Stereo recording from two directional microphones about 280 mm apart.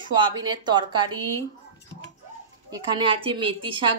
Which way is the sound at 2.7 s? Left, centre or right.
Centre.